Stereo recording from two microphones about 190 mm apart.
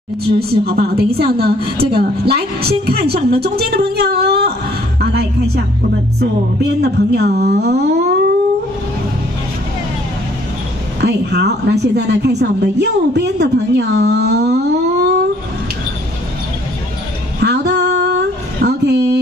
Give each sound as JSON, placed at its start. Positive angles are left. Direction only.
{"t": 0.7, "sound": "a woman's voice", "side_deg": -55}
{"t": 6.1, "sound": "a woman's voice", "side_deg": -60}
{"t": 11.0, "sound": "a woman's voice", "side_deg": -60}
{"t": 17.4, "sound": "a sound", "side_deg": -65}
{"t": 18.6, "sound": "a woman's voice", "side_deg": -60}